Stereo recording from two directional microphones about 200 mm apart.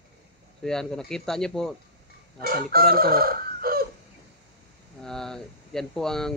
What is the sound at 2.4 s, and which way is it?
Fowl, 45° right (ahead or behind).